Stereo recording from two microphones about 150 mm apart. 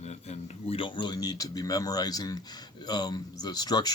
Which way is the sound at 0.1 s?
45° left (ahead or behind).